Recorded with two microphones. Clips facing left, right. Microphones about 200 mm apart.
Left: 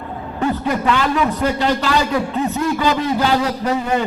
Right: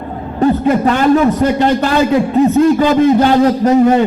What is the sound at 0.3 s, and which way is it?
A man's voice, 35° right (ahead or behind).